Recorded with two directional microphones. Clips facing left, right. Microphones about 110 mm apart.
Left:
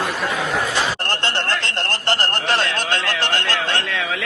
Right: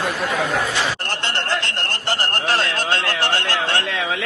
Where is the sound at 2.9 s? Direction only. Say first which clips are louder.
Right 1 dB; 15° right (ahead or behind).